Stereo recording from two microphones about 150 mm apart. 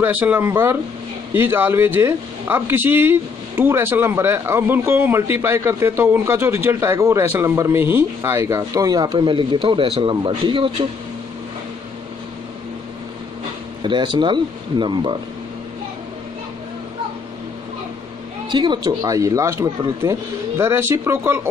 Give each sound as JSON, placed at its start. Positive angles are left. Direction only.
{"t": 0.0, "sound": "speech", "side_deg": -10}
{"t": 13.8, "sound": "speech", "side_deg": -30}
{"t": 18.5, "sound": "speech", "side_deg": -30}